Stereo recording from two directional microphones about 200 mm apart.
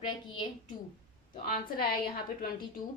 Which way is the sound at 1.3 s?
45° left (ahead or behind).